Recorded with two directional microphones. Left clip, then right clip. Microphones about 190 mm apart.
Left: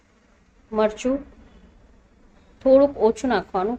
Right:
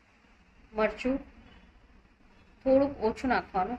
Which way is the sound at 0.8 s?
40° left (ahead or behind).